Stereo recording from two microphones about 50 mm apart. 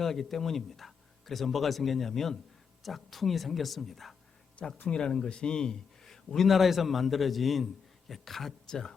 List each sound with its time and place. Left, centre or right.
0.0 s speech: centre
4.9 s a man's voice: centre